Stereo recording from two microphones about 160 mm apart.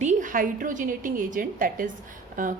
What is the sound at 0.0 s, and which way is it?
A woman's voice, 50° right (ahead or behind).